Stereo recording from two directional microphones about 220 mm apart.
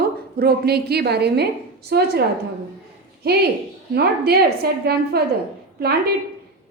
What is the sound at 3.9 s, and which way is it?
A woman's voice, 45° right (ahead or behind).